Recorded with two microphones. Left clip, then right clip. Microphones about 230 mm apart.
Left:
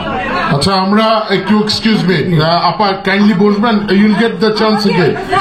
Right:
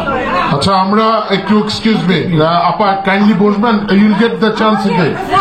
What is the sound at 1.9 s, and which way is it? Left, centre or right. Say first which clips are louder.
A man's voice: even; left.